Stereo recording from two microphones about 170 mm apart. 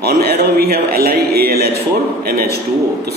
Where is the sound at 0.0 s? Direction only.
70° right (ahead or behind).